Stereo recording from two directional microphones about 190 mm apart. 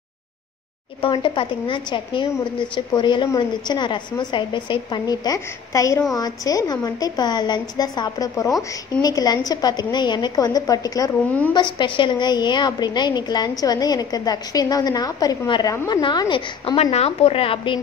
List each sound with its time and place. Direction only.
1.0 s a woman's voice: 25° left (ahead or behind)